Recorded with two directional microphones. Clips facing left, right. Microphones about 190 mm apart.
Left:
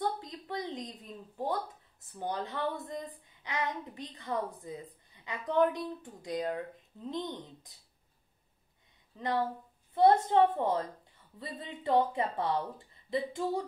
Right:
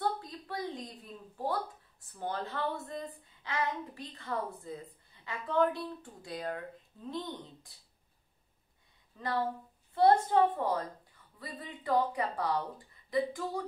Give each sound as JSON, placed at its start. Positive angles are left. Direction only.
{"t": 0.0, "sound": "speech", "side_deg": 20}
{"t": 9.1, "sound": "a woman's voice", "side_deg": 20}